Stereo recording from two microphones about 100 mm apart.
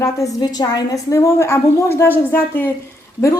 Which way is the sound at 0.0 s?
35° left (ahead or behind).